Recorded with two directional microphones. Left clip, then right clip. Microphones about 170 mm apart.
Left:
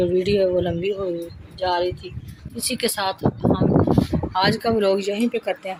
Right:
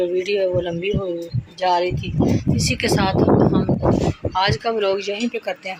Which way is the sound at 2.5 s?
Centre (ahead or behind).